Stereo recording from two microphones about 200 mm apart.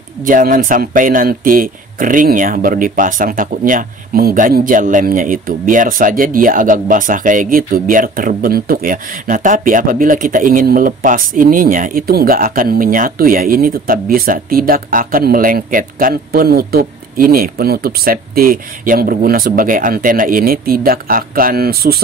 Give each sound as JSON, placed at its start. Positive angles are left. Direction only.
{"t": 0.2, "sound": "speech", "side_deg": -40}